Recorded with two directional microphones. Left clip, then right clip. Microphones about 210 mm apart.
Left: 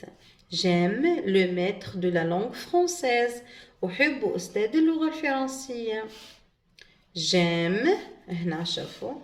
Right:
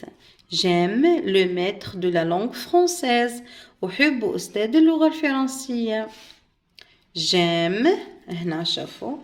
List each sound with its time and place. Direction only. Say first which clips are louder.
0.5 s speech: right 5 dB; 45° right (ahead or behind)